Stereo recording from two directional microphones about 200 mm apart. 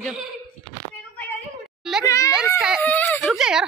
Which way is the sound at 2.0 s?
15° left (ahead or behind).